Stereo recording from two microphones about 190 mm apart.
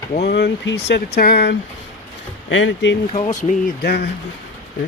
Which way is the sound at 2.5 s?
80° left.